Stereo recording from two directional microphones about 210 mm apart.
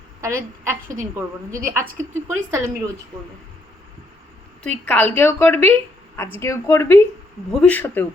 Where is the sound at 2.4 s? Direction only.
10° right (ahead or behind).